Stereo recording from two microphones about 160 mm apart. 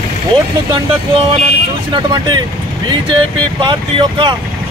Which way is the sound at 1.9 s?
25° right (ahead or behind).